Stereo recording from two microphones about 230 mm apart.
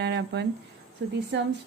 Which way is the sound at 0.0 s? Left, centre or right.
Right.